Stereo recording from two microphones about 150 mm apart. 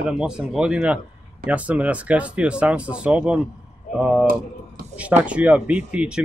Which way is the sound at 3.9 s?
60° left (ahead or behind).